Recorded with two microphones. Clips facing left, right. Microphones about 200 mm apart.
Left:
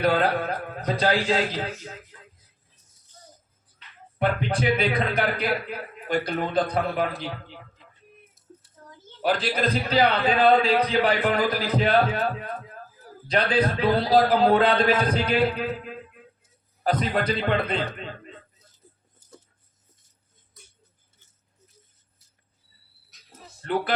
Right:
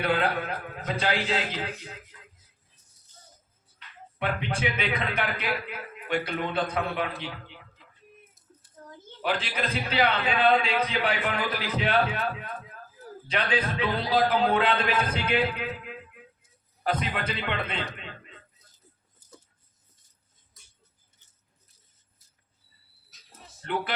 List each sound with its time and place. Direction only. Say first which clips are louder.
0.0 s a man's voice: left 4 dB; 40° left (ahead or behind)
4.2 s a man's voice: left 5 dB; 40° left (ahead or behind)
9.2 s a man's voice: left 6 dB; 40° left (ahead or behind)